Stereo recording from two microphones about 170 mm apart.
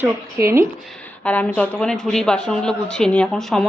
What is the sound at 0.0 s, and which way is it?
Speech, 15° right (ahead or behind).